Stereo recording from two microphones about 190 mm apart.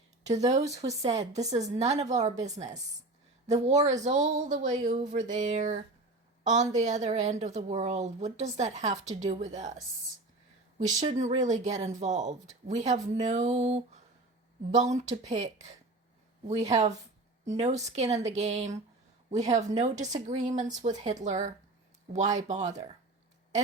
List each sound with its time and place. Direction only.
0.3 s speech: 35° right (ahead or behind)
10.8 s speech: 40° right (ahead or behind)
15.2 s speech: 40° right (ahead or behind)